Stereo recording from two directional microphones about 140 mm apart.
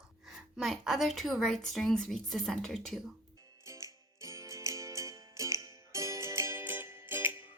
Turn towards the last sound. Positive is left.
turn(degrees=-15)  # may be behind; listen again after turning